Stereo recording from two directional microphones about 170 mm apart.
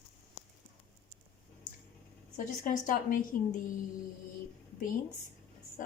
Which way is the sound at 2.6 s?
50° left (ahead or behind).